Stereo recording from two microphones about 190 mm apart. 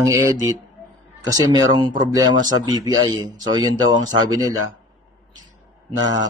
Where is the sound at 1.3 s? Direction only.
20° right (ahead or behind).